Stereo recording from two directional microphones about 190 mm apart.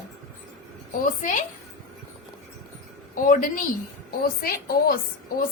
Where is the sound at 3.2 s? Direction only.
45° left (ahead or behind).